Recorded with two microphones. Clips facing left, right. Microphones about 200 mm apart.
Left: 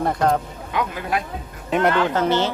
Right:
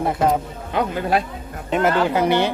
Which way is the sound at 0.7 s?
35° right (ahead or behind).